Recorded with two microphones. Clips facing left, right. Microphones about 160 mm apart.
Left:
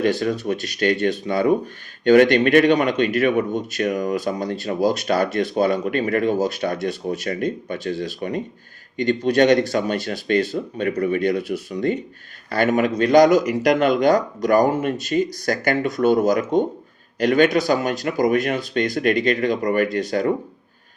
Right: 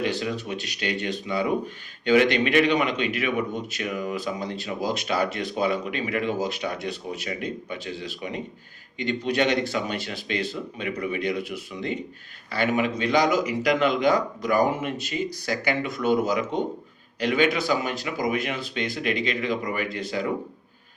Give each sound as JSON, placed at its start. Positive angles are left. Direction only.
{"t": 0.0, "sound": "a man's voice", "side_deg": 45}